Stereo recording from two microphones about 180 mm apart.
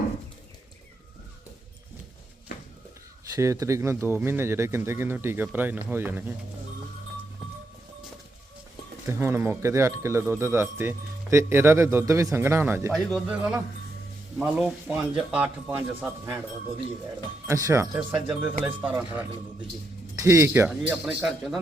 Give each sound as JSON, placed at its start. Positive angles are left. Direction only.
{"t": 3.3, "sound": "speech", "side_deg": -15}
{"t": 9.0, "sound": "speech", "side_deg": -15}
{"t": 12.9, "sound": "a man's voice", "side_deg": 0}
{"t": 17.4, "sound": "a man's voice", "side_deg": -15}